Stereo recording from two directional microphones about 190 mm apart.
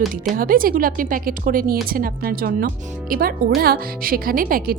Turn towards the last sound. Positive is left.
turn(degrees=-50)  # may be behind; listen again after turning